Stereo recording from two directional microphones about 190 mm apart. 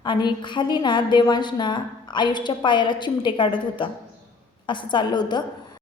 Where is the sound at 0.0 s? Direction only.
25° left (ahead or behind).